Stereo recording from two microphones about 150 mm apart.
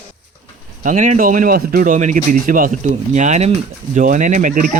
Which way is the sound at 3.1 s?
50° right (ahead or behind).